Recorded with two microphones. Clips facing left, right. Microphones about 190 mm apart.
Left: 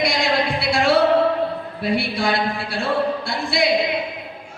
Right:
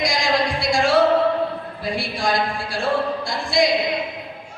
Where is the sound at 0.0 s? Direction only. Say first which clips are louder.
Left 1 dB; 60° left (ahead or behind).